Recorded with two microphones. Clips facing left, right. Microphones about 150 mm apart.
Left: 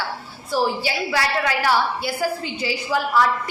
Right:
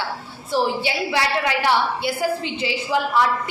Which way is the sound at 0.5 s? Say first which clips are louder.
Right 1 dB; 20° right (ahead or behind).